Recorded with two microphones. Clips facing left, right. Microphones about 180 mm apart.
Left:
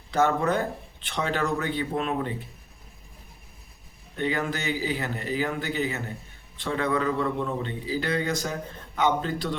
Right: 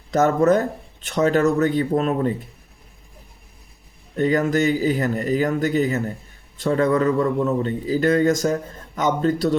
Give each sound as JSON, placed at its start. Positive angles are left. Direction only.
{"t": 0.1, "sound": "a man's voice", "side_deg": -40}
{"t": 4.2, "sound": "a man's voice", "side_deg": -40}